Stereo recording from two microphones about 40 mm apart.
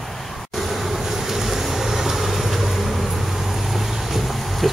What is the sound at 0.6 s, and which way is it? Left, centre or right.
Vehicle, centre.